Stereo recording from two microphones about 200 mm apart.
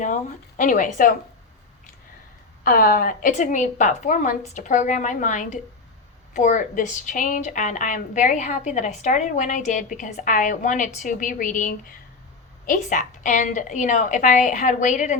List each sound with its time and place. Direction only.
0.0 s a woman's voice: 40° left (ahead or behind)
2.6 s a woman's voice: 45° left (ahead or behind)